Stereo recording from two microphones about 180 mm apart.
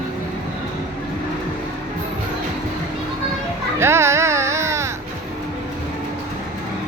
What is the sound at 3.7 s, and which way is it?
Speech, 15° right (ahead or behind).